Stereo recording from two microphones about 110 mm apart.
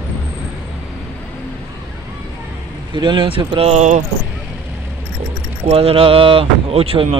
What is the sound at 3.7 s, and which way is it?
Speech, 90° right.